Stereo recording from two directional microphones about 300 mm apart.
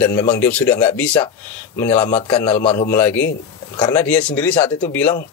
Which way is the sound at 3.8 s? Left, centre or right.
Centre.